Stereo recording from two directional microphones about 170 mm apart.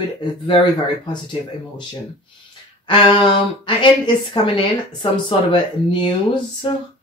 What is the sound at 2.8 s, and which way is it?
Speech, 30° left (ahead or behind).